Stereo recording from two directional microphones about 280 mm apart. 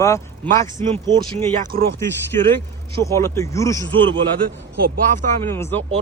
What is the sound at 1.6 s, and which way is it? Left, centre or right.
Speech, right.